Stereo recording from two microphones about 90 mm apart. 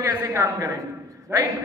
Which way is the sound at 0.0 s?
30° right (ahead or behind).